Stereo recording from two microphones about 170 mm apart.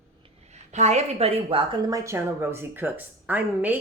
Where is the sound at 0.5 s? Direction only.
40° right (ahead or behind).